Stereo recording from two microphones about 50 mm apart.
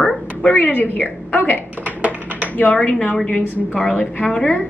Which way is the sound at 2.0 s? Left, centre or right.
Right.